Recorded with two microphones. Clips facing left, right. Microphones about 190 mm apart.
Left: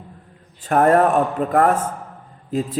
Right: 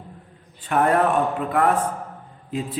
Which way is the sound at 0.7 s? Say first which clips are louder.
Left 4 dB; 45° left (ahead or behind).